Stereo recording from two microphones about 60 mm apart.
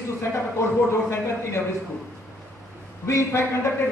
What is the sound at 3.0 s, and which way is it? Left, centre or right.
Speech, left.